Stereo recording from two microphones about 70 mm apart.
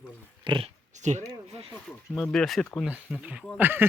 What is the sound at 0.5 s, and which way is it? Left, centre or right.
Speech, right.